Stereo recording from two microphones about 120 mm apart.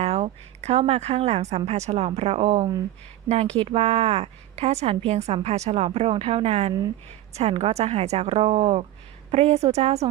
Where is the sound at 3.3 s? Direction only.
55° right (ahead or behind).